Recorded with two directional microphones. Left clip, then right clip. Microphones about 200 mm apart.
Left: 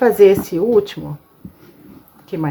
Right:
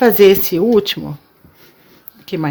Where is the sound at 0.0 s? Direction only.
45° right (ahead or behind).